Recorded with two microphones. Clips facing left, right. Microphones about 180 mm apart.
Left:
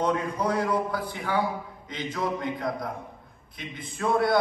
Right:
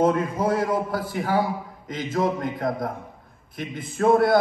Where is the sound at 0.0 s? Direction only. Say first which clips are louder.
Right 5 dB; 45° right (ahead or behind).